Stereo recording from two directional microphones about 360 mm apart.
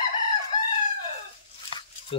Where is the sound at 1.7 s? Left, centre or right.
Centre.